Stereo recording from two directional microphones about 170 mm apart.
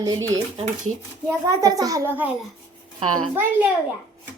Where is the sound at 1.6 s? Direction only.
20° right (ahead or behind).